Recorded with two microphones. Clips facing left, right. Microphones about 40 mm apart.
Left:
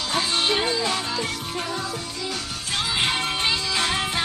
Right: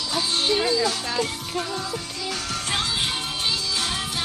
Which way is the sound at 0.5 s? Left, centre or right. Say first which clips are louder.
Right 1 dB; left.